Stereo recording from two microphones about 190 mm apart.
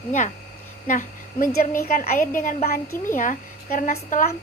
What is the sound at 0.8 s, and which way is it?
A woman's voice, 45° left (ahead or behind).